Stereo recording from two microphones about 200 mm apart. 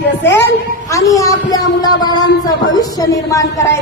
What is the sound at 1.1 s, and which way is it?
Speech, 20° left (ahead or behind).